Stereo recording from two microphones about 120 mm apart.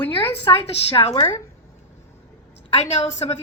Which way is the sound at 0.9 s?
55° left (ahead or behind).